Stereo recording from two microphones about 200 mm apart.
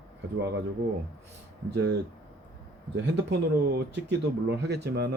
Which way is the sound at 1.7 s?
55° right (ahead or behind).